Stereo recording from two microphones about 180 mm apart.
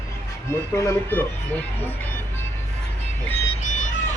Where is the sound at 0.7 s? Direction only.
15° left (ahead or behind).